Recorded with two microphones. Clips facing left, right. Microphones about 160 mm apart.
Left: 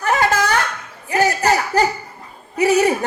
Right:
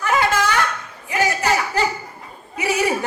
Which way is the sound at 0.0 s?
40° left (ahead or behind).